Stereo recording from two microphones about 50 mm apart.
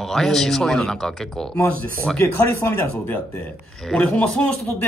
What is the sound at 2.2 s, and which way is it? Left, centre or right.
Speech, left.